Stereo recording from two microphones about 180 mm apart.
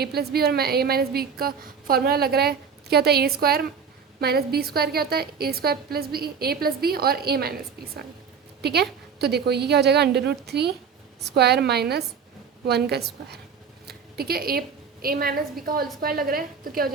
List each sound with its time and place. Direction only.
0.0 s a woman's voice: 60° right (ahead or behind)
13.8 s a sound: 60° right (ahead or behind)
15.0 s a woman's voice: 55° right (ahead or behind)